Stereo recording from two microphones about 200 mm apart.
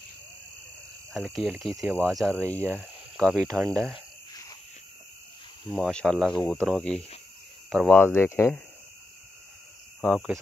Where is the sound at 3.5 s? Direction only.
5° right (ahead or behind).